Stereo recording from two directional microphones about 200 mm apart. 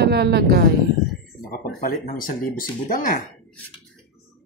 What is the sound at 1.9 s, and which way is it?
Speech, 45° left (ahead or behind).